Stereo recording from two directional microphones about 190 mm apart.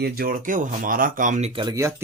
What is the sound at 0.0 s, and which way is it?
Speech, 50° right (ahead or behind).